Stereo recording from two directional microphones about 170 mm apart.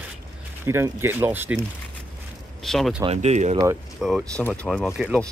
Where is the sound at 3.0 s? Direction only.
40° right (ahead or behind).